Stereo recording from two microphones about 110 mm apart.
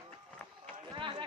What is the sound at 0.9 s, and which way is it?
Run, 50° right (ahead or behind).